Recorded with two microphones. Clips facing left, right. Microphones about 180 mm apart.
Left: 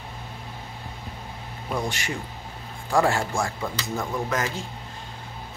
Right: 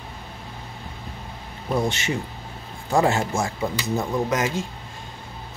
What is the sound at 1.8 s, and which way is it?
Speech, 25° right (ahead or behind).